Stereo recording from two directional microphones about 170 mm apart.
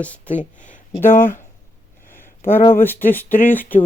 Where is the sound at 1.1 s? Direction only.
50° left (ahead or behind).